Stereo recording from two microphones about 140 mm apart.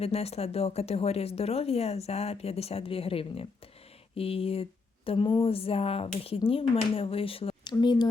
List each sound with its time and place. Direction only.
0.0 s speech: 45° left (ahead or behind); by 8.0 s 30° left (ahead or behind)